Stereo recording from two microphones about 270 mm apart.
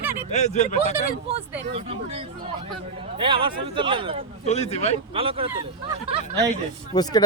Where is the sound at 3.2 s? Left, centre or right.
Centre.